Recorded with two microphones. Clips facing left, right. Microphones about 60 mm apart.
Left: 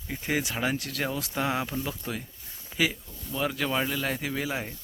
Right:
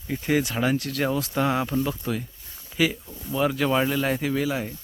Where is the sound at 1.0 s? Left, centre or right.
Centre.